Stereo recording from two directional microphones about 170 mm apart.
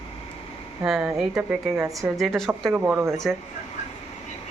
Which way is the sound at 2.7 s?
15° right (ahead or behind).